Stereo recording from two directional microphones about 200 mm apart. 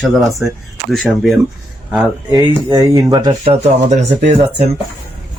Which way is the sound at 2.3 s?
20° right (ahead or behind).